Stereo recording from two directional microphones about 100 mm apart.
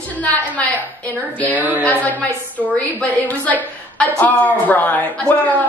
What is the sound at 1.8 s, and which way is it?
A woman's voice, 15° left (ahead or behind).